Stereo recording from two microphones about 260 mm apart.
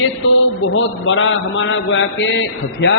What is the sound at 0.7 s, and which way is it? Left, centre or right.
A woman's voice, left.